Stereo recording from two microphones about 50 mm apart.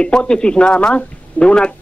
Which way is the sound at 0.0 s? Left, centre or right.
Centre.